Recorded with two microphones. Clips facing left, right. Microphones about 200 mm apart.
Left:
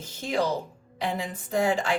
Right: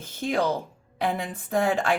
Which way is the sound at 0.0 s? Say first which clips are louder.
Right 2 dB; 55° right (ahead or behind).